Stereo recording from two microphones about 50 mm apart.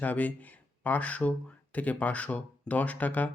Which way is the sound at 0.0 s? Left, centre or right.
Left.